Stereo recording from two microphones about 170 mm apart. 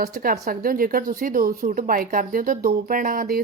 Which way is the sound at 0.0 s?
60° right (ahead or behind).